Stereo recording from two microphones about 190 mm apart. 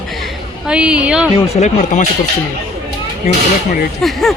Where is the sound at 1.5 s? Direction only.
35° left (ahead or behind).